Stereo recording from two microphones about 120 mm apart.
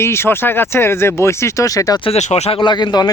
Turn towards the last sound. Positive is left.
turn(degrees=35)  # may be behind; listen again after turning